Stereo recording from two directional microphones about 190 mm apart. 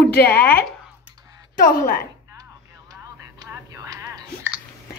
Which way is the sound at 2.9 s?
15° right (ahead or behind).